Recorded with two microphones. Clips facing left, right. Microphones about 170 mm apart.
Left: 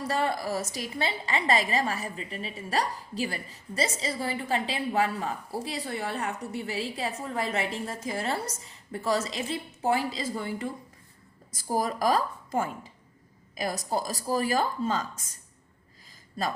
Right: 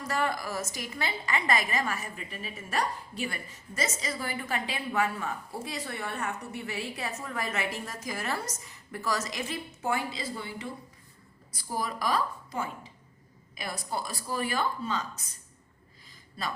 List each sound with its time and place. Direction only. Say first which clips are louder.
0.0 s a woman's voice: left 3 dB; 30° left (ahead or behind)
16.4 s a woman's voice: left 5 dB; 45° left (ahead or behind)